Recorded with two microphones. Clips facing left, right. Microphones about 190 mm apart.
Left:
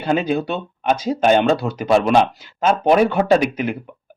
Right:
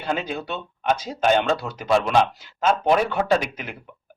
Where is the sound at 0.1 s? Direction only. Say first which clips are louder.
Left 8 dB; 15° left (ahead or behind).